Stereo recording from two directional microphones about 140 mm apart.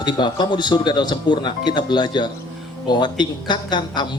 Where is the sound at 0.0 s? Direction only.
30° left (ahead or behind).